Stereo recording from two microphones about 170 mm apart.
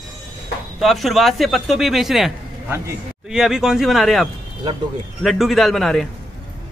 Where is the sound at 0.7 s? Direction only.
Centre (ahead or behind).